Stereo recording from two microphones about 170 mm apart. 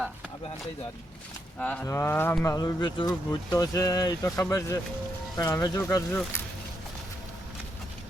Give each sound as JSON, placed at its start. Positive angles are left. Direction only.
{"t": 1.5, "sound": "speech", "side_deg": 5}